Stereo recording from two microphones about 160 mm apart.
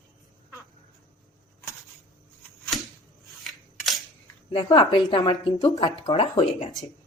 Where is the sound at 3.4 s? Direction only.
Centre (ahead or behind).